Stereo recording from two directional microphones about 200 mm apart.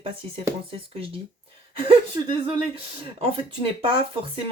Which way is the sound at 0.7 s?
25° right (ahead or behind).